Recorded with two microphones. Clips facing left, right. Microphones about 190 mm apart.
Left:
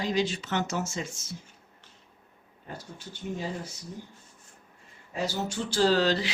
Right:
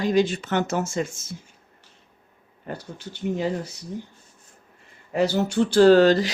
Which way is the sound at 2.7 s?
65° right (ahead or behind).